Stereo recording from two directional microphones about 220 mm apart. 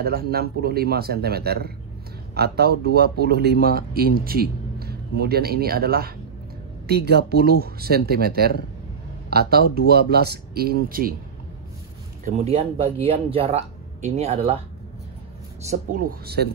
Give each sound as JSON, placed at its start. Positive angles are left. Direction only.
{"t": 0.0, "sound": "a man's voice", "side_deg": -45}
{"t": 12.3, "sound": "speech", "side_deg": -30}
{"t": 15.7, "sound": "speech", "side_deg": -40}